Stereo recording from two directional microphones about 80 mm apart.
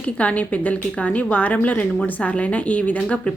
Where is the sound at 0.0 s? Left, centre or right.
Centre.